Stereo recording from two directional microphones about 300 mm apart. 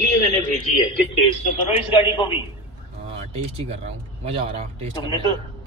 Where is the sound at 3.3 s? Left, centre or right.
Centre.